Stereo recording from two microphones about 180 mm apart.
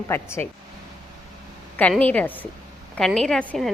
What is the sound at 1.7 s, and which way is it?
A woman's voice, 10° left (ahead or behind).